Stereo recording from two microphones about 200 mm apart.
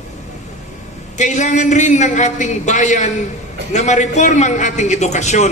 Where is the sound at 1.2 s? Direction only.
35° left (ahead or behind).